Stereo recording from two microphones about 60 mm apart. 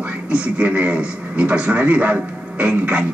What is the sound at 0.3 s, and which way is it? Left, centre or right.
Speech, right.